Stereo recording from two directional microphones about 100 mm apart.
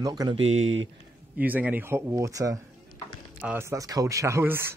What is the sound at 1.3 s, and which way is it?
Speech, 15° right (ahead or behind).